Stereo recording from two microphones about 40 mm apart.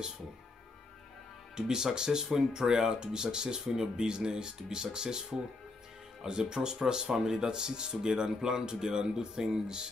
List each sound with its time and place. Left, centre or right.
1.6 s speech: centre
6.5 s speech: centre